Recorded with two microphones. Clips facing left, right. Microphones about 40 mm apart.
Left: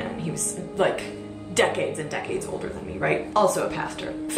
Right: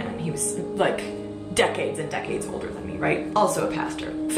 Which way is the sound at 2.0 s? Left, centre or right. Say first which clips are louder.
Right 1 dB; centre.